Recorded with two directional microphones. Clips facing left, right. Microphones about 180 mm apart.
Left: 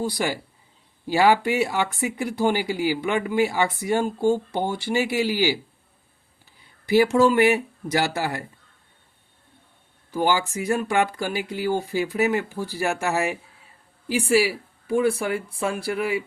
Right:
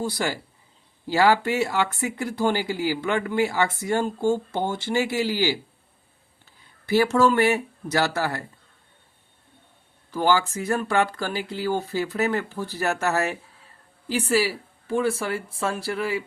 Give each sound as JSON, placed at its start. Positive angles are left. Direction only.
{"t": 0.0, "sound": "speech", "side_deg": 15}
{"t": 6.8, "sound": "speech", "side_deg": 15}
{"t": 10.1, "sound": "speech", "side_deg": 15}